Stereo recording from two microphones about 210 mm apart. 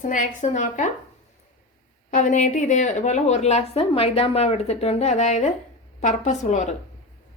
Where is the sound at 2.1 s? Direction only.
35° left (ahead or behind).